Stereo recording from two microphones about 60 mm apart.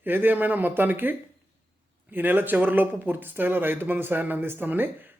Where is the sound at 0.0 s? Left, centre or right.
Right.